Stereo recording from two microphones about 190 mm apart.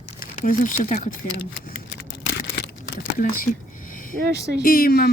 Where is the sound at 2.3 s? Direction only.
55° left (ahead or behind).